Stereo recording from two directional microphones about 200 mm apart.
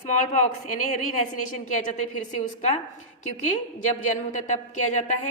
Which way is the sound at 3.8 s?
35° left (ahead or behind).